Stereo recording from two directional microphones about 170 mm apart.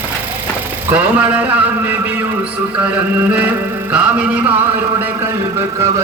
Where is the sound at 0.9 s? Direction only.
10° right (ahead or behind).